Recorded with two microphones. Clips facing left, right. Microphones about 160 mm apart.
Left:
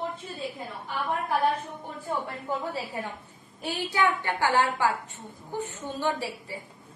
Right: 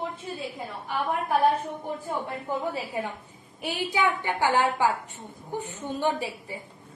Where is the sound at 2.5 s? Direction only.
15° right (ahead or behind).